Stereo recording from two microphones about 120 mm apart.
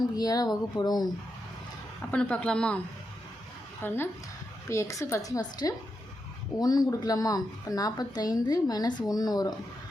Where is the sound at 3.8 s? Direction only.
20° left (ahead or behind).